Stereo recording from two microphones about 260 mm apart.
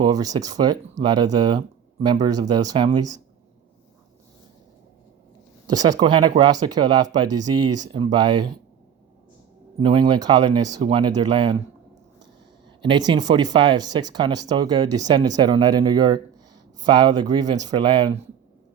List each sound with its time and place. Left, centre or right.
0.0 s speech: centre
5.6 s speech: centre
9.8 s speech: centre
12.8 s speech: centre